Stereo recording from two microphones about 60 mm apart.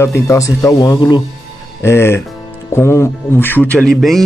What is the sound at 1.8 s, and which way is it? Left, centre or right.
Speech, left.